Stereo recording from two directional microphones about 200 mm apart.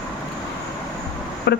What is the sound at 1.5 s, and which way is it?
Speech, 55° left (ahead or behind).